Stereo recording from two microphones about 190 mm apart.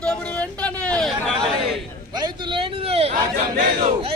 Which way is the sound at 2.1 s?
25° right (ahead or behind).